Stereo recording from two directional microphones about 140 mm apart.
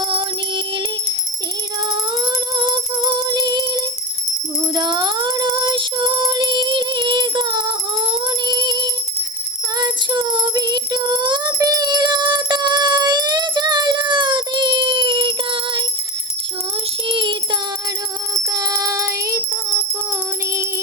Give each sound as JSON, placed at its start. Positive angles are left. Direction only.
{"t": 0.0, "sound": "music", "side_deg": -35}
{"t": 1.9, "sound": "music", "side_deg": -35}
{"t": 17.1, "sound": "music", "side_deg": -35}
{"t": 18.4, "sound": "music", "side_deg": -25}